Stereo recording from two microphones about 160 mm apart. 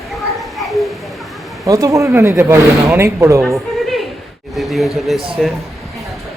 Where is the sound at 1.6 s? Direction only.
20° right (ahead or behind).